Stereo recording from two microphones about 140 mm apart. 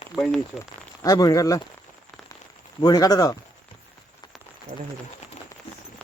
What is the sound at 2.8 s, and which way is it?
Speech, 30° left (ahead or behind).